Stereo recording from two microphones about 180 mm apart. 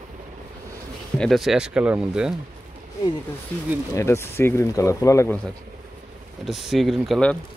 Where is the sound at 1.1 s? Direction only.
Centre (ahead or behind).